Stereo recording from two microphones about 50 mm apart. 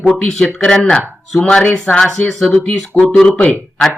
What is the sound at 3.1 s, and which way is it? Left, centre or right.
Speech, left.